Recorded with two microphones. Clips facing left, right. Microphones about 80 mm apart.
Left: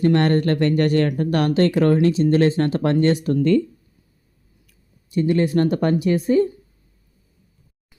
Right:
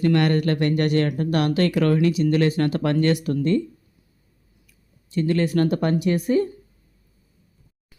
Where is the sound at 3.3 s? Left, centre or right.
Left.